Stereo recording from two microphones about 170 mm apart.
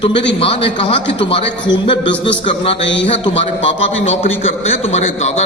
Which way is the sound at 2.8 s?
90° left.